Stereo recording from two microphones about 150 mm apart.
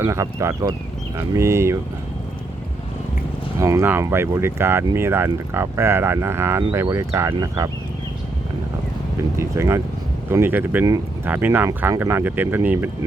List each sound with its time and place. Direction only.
0.0 s speech: 20° right (ahead or behind)
3.6 s speech: 20° right (ahead or behind)
9.4 s speech: 20° right (ahead or behind)